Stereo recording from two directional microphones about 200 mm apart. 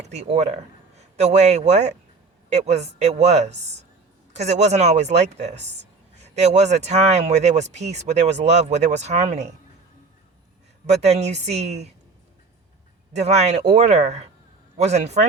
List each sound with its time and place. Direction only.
0.0 s a man's voice: 35° right (ahead or behind)
11.0 s speech: 35° right (ahead or behind)
13.1 s speech: 35° right (ahead or behind)